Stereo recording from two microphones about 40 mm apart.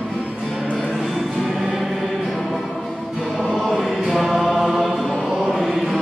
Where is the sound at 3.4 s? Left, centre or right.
Centre.